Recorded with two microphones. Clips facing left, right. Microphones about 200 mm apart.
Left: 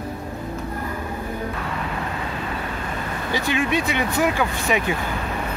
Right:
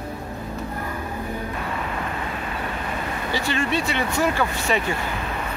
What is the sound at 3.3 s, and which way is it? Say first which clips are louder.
Speech: left 2 dB; 15° left (ahead or behind).